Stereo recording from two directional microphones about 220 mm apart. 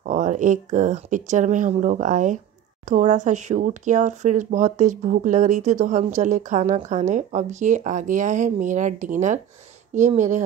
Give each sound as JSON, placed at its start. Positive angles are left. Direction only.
{"t": 0.0, "sound": "speech", "side_deg": -35}